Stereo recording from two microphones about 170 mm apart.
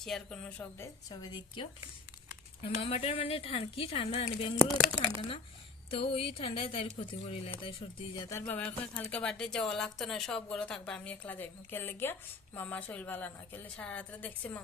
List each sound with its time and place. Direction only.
0.0 s speech: 5° left (ahead or behind)
1.1 s speech: 25° left (ahead or behind)
2.6 s speech: 35° left (ahead or behind)
5.9 s speech: 30° left (ahead or behind)
8.4 s a woman's voice: 10° left (ahead or behind)